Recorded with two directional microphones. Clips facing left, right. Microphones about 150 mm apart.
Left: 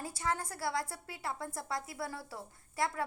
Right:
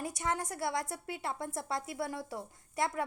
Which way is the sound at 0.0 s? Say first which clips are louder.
Right 1 dB; 20° right (ahead or behind).